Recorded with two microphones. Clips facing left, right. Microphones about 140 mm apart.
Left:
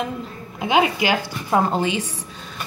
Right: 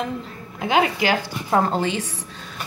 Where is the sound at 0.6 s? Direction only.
10° left (ahead or behind).